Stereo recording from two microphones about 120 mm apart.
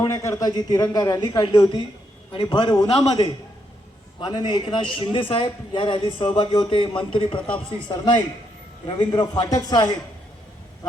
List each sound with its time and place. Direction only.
0.0 s a man's voice: 25° left (ahead or behind)